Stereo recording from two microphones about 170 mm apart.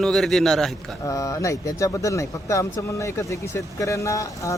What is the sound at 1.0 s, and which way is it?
Speech, 20° left (ahead or behind).